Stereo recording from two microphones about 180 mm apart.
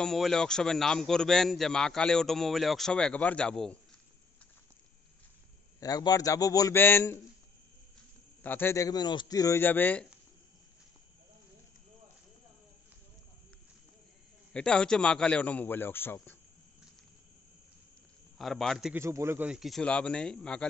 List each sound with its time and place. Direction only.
0.0 s a man's voice: centre (ahead or behind)
5.8 s a man's voice: 20° left (ahead or behind)
8.4 s a man's voice: 10° left (ahead or behind)
14.5 s a man's voice: 5° left (ahead or behind)
18.4 s a man's voice: centre (ahead or behind)
18.9 s a man's voice: 15° right (ahead or behind); by 20.6 s 5° left (ahead or behind)